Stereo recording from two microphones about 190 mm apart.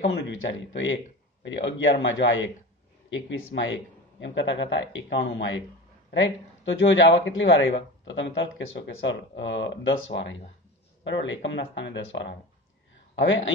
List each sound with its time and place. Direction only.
0.3 s a man's voice: 80° left
8.0 s a man's voice: 75° left (ahead or behind)